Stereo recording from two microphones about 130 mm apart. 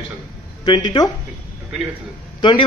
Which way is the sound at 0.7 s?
35° left (ahead or behind).